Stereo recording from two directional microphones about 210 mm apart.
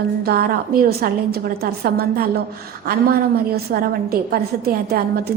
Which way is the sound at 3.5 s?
45° right (ahead or behind).